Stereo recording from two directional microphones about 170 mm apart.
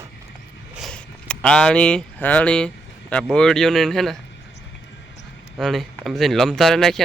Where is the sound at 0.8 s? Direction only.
5° left (ahead or behind).